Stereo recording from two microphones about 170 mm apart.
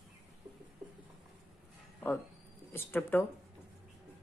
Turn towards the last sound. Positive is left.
turn(degrees=10)  # may be behind; listen again after turning